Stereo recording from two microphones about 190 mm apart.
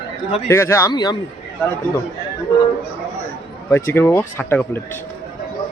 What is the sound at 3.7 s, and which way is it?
A man's voice, 15° left (ahead or behind).